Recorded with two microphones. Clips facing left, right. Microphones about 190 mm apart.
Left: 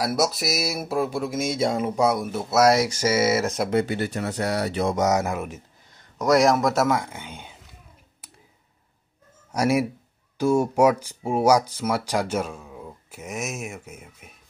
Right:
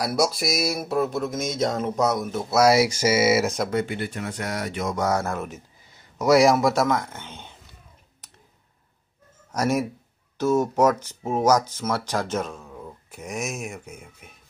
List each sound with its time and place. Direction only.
0.0 s speech: centre (ahead or behind)
3.7 s speech: 35° left (ahead or behind)
4.9 s speech: 20° left (ahead or behind)
5.9 s speech: 5° right (ahead or behind)
9.5 s speech: 10° left (ahead or behind)